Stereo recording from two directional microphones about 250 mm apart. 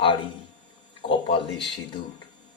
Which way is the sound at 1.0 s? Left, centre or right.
Left.